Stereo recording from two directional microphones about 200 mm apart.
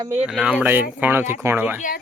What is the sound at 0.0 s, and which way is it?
Speech, 10° right (ahead or behind).